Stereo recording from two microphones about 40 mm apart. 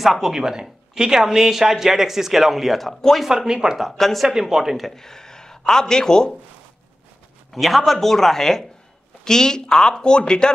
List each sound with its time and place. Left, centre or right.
0.0 s speech: centre
2.9 s speech: centre
3.3 s speech: centre
3.9 s speech: centre
4.3 s speech: centre
4.7 s speech: centre
7.5 s speech: centre; by 10.5 s left